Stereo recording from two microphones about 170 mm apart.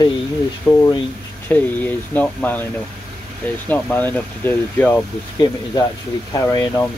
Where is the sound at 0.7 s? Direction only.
10° left (ahead or behind).